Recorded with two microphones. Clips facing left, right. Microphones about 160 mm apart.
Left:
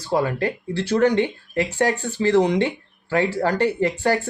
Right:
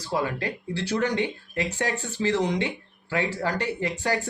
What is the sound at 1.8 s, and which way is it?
Speech, 55° left (ahead or behind).